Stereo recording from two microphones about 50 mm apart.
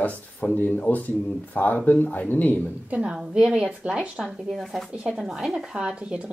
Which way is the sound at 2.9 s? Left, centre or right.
Right.